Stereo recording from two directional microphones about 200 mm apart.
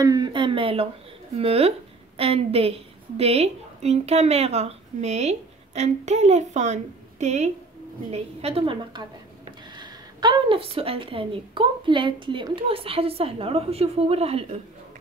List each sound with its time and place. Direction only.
0.0 s a woman's voice: 20° right (ahead or behind)